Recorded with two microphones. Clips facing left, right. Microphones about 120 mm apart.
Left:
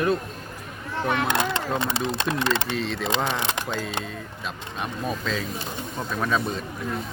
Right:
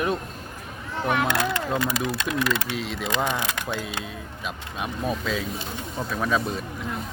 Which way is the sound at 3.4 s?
25° left (ahead or behind).